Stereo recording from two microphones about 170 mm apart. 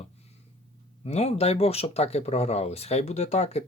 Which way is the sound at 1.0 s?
40° left (ahead or behind).